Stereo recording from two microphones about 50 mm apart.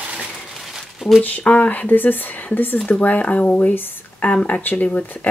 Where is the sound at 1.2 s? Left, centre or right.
Left.